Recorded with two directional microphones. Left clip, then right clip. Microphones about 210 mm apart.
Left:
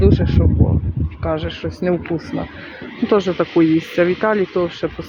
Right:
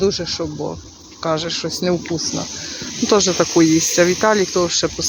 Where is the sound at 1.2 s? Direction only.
Centre (ahead or behind).